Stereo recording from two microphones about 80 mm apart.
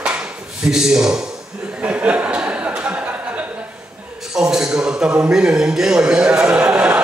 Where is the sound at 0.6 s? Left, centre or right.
Centre.